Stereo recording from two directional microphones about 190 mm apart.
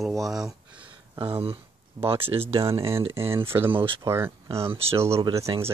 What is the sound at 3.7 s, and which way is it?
Speech, 25° right (ahead or behind).